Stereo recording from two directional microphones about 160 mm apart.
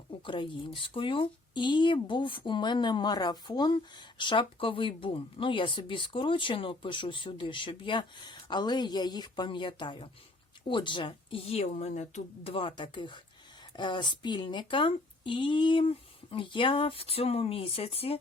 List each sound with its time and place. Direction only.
0.3 s speech: 30° left (ahead or behind)